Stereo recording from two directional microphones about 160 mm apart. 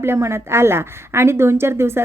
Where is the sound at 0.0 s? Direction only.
15° right (ahead or behind).